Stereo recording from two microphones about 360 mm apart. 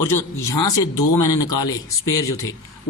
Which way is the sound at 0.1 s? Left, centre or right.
Centre.